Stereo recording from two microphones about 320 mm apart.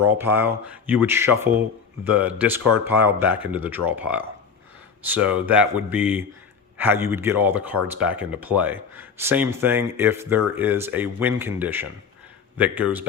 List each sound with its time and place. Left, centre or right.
0.0 s speech: centre